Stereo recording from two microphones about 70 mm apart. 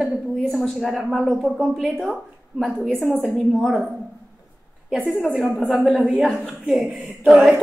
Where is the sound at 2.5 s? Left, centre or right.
Centre.